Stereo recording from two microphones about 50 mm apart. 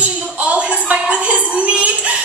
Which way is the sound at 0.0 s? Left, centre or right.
Right.